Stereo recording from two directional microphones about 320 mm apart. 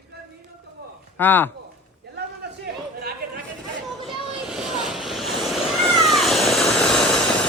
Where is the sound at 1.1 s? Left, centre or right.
Centre.